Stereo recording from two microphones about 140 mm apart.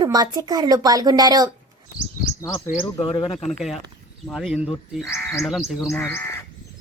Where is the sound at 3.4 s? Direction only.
Centre (ahead or behind).